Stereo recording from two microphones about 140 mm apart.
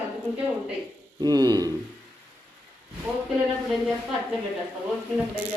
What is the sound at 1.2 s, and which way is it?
Speech, 30° right (ahead or behind).